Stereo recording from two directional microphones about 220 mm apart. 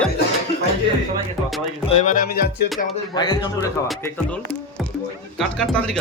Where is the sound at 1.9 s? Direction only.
35° left (ahead or behind).